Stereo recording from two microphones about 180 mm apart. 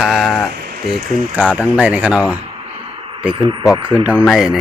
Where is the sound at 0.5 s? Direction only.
60° right (ahead or behind).